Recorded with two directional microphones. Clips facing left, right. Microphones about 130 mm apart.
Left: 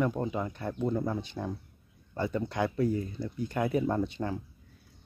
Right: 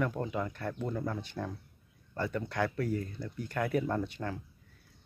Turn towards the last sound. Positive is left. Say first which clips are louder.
# left 4 dB
turn(degrees=20)  # may be behind; listen again after turning